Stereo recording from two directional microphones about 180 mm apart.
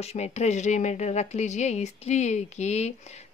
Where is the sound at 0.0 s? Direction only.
35° left (ahead or behind).